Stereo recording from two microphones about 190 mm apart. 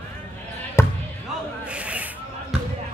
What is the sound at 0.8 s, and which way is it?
Basketball bounce, 15° left (ahead or behind).